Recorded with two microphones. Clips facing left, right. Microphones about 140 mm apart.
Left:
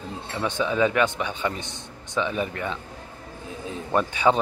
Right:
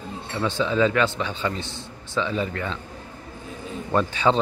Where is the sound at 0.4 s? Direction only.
15° left (ahead or behind).